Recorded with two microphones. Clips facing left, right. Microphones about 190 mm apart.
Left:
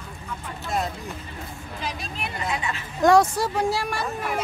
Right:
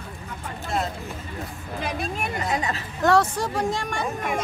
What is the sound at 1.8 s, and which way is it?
A woman's voice, 55° right (ahead or behind).